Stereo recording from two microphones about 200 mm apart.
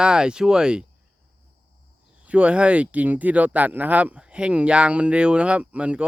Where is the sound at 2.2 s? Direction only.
5° right (ahead or behind).